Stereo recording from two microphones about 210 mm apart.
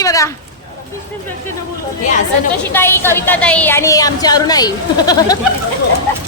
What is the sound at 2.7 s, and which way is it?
A woman's voice, 10° left (ahead or behind).